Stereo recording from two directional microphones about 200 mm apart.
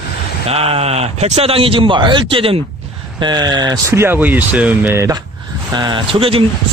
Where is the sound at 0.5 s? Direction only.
30° right (ahead or behind).